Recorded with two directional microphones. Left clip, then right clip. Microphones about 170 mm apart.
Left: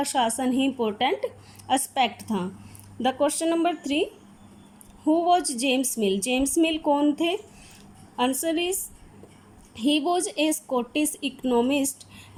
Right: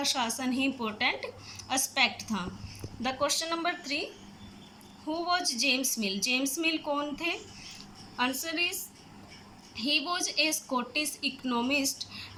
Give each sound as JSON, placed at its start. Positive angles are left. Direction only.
{"t": 0.0, "sound": "a woman's voice", "side_deg": 50}
{"t": 5.1, "sound": "a woman's voice", "side_deg": 45}
{"t": 9.8, "sound": "a woman's voice", "side_deg": 50}